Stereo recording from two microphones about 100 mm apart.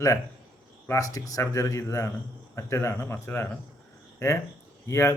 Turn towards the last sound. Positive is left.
turn(degrees=25)  # may be behind; listen again after turning